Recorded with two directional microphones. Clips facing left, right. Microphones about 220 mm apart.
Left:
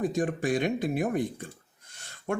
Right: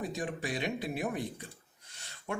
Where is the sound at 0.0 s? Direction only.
50° left (ahead or behind).